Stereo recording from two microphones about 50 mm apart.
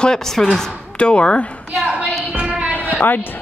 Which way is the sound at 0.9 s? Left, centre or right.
Left.